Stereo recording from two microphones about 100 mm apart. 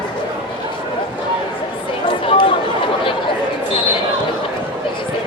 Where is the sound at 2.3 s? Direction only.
60° left (ahead or behind).